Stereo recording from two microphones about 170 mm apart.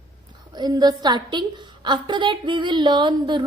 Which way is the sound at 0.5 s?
25° right (ahead or behind).